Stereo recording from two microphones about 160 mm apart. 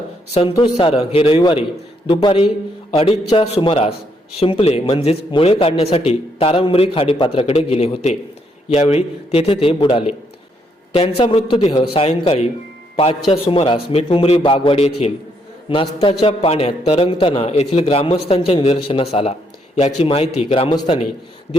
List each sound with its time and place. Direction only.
0.5 s a man's voice: 30° left (ahead or behind)
2.9 s a man's voice: 40° left (ahead or behind)